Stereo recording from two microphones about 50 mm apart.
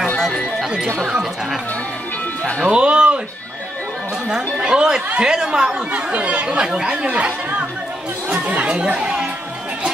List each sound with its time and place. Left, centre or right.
0.9 s speech: centre
2.6 s music: centre
4.3 s speech: centre